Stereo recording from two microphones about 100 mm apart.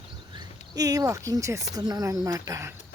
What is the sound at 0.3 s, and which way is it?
Speech, 40° right (ahead or behind).